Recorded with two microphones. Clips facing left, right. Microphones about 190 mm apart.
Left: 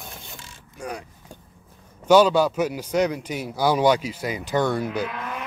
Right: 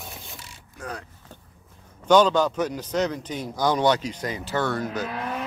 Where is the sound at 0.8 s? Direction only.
15° left (ahead or behind).